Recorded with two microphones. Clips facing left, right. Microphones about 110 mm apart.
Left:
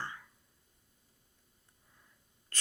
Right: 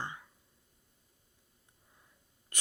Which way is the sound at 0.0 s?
20° right (ahead or behind).